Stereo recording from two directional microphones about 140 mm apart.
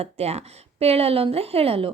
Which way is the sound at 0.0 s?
50° right (ahead or behind).